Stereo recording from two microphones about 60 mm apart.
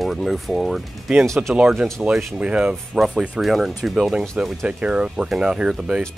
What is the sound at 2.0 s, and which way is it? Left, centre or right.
Speech, centre.